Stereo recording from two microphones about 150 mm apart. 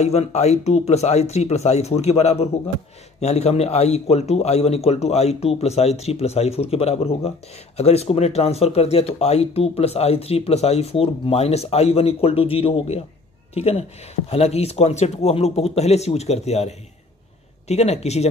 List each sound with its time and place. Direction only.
0.0 s speech: 45° left (ahead or behind)